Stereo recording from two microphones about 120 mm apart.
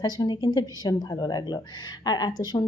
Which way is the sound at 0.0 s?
35° left (ahead or behind).